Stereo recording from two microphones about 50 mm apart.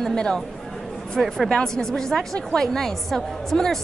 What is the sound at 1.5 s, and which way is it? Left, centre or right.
A woman's voice, centre.